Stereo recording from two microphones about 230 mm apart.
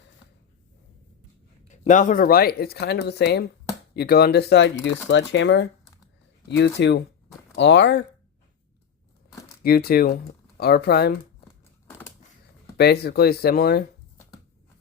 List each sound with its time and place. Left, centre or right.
1.9 s speech: left
9.6 s speech: left
11.9 s a sound: centre
12.7 s speech: left